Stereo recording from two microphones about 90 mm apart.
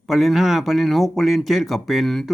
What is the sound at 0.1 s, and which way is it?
Speech, centre (ahead or behind).